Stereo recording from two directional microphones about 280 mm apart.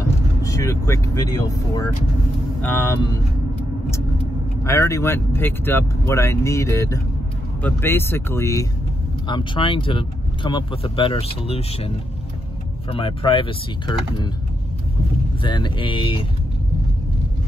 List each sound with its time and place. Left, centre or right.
0.4 s speech: centre
4.6 s speech: centre
12.9 s speech: centre
15.4 s speech: centre